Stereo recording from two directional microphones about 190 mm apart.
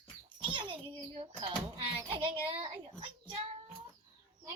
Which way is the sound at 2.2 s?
25° right (ahead or behind).